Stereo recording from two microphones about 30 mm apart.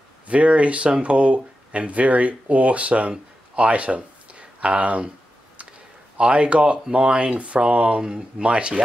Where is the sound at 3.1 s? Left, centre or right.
Right.